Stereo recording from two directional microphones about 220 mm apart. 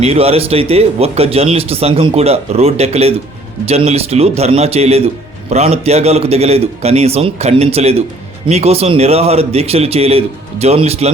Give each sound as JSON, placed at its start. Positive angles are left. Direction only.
{"t": 0.0, "sound": "a man's voice", "side_deg": -30}